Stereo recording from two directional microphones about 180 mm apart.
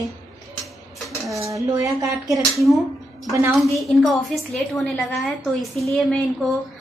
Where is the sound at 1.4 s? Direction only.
15° right (ahead or behind).